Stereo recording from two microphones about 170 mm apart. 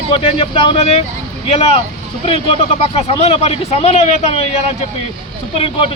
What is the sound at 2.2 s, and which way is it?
A man's voice, 35° left (ahead or behind).